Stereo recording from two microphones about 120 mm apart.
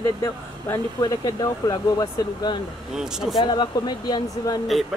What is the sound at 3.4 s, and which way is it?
Speech, 40° left (ahead or behind).